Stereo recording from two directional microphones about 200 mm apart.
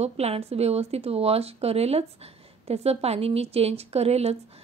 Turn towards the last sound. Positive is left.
turn(degrees=-30)  # may be behind; listen again after turning